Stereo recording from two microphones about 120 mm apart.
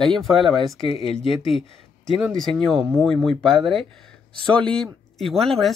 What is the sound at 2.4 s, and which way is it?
Speech, 5° left (ahead or behind).